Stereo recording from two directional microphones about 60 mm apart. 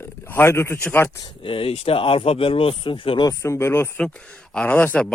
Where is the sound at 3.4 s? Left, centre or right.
Left.